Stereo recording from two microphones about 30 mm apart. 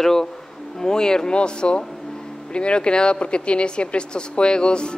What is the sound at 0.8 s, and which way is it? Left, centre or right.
Speech, left.